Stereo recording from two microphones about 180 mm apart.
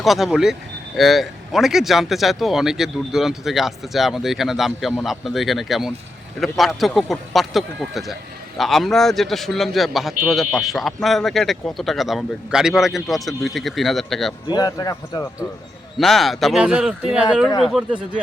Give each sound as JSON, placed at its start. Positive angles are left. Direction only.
{"t": 0.0, "sound": "a man's voice", "side_deg": 0}
{"t": 14.4, "sound": "speech", "side_deg": 20}
{"t": 16.0, "sound": "a man's voice", "side_deg": 0}